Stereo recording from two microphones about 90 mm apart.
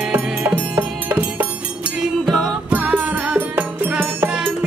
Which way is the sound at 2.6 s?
15° right (ahead or behind).